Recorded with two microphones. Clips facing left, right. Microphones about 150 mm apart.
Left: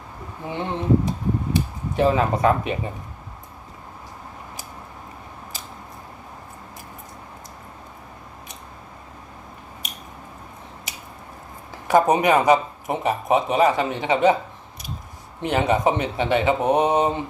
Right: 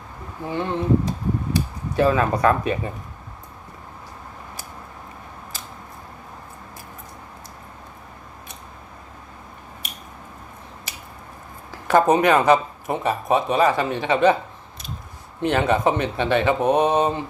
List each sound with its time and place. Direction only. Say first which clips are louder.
0.5 s speech: even; 20° left (ahead or behind)
11.9 s speech: right 1 dB; 15° left (ahead or behind)
15.4 s speech: right 1 dB; 15° left (ahead or behind)